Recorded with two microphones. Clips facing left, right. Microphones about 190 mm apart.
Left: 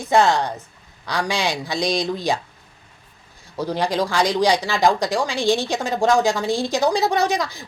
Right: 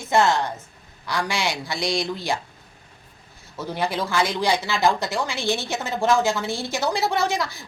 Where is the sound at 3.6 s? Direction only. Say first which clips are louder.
Left 4 dB; 15° left (ahead or behind).